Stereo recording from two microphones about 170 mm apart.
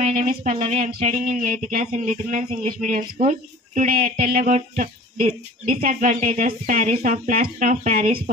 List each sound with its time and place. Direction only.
0.0 s speech: 50° right (ahead or behind)